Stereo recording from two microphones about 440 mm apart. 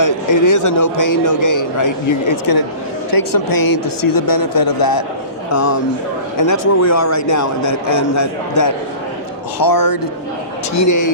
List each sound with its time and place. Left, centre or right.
0.0 s a man's voice: left
6.3 s a man's voice: left